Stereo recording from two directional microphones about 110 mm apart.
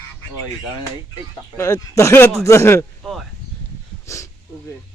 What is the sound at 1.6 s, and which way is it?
Speech, 25° left (ahead or behind).